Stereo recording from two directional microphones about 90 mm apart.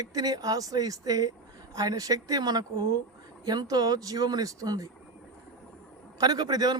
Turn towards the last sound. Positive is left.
turn(degrees=-45)  # may be behind; listen again after turning